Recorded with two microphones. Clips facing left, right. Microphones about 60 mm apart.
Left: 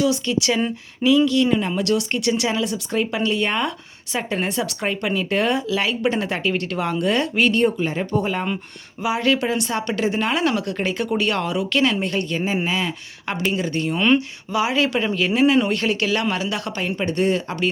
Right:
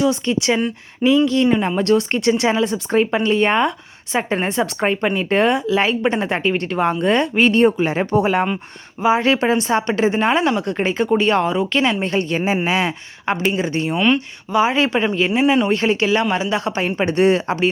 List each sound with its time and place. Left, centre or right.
0.1 s speech: right
7.5 s speech: right
9.0 s speech: right
10.1 s speech: right
11.2 s speech: centre
11.4 s speech: right
11.7 s speech: right
12.6 s speech: right
13.2 s a woman's voice: centre
13.6 s speech: right
14.0 s speech: centre
14.7 s speech: right
15.7 s speech: right
16.6 s speech: right